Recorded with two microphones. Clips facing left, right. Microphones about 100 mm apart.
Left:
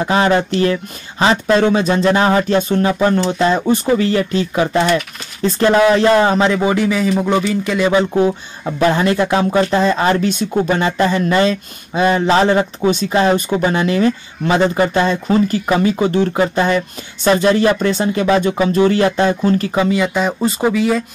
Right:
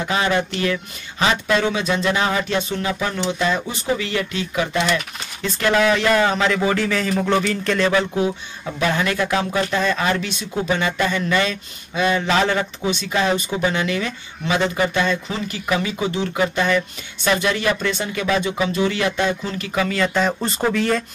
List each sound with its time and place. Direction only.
0.0 s a man's voice: 35° left (ahead or behind); by 7.9 s 10° left (ahead or behind)
8.7 s speech: 35° left (ahead or behind)
10.4 s speech: 50° left (ahead or behind); by 12.6 s 30° left (ahead or behind)
12.8 s speech: 40° left (ahead or behind)
16.3 s speech: 30° left (ahead or behind)
18.4 s speech: 45° left (ahead or behind)
19.7 s a man's voice: 25° left (ahead or behind)
20.0 s speech: 10° left (ahead or behind)